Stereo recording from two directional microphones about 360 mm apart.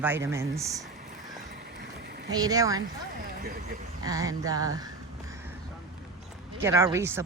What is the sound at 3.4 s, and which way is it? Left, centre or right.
Speech, right.